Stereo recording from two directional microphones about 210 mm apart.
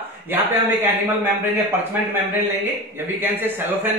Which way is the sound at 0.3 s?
10° right (ahead or behind).